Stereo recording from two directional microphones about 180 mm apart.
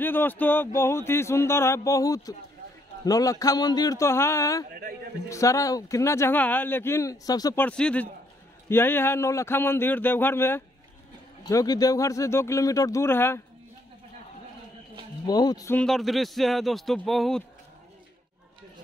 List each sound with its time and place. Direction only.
0.0 s speech: 10° left (ahead or behind)
4.6 s a man's voice: 55° right (ahead or behind)
5.3 s speech: 15° left (ahead or behind)
7.6 s speech: 5° left (ahead or behind)
15.2 s speech: 20° left (ahead or behind)
15.7 s speech: 5° left (ahead or behind)